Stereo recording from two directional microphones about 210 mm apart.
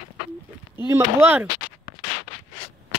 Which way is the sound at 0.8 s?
10° right (ahead or behind).